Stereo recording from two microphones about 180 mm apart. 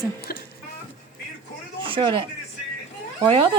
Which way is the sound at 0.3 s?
55° left (ahead or behind).